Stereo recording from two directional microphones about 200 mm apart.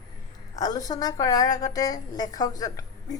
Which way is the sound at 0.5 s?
20° left (ahead or behind).